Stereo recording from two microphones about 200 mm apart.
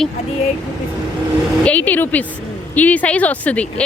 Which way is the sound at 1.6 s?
5° left (ahead or behind).